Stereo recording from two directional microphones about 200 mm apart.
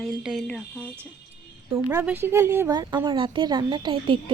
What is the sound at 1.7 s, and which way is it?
A woman's voice, 10° right (ahead or behind).